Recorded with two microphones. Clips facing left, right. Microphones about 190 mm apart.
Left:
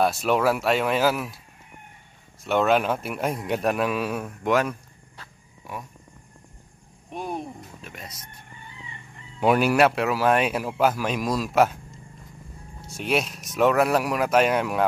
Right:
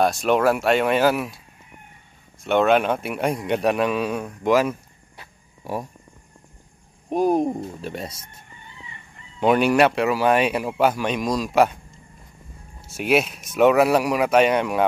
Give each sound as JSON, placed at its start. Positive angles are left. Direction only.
{"t": 0.0, "sound": "a man's voice", "side_deg": 5}
{"t": 2.4, "sound": "a man's voice", "side_deg": 0}
{"t": 5.6, "sound": "speech", "side_deg": -35}
{"t": 7.1, "sound": "speech", "side_deg": -40}
{"t": 9.4, "sound": "a man's voice", "side_deg": 5}
{"t": 12.8, "sound": "a man's voice", "side_deg": -5}